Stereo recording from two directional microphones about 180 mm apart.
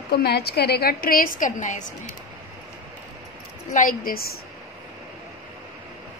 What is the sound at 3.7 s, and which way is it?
Speech, 50° left (ahead or behind).